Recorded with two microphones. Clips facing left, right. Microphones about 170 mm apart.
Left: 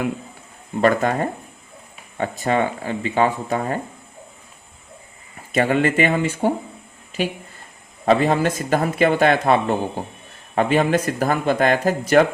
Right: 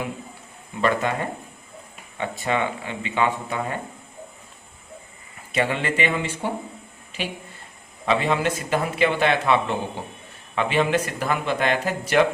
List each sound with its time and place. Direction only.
0.8 s speech: 45° left (ahead or behind)
5.5 s speech: 45° left (ahead or behind)
8.0 s speech: 40° left (ahead or behind)